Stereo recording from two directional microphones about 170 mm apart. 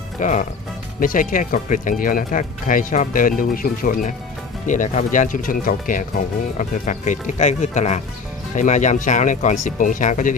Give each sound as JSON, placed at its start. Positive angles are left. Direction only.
{"t": 0.2, "sound": "speech", "side_deg": 45}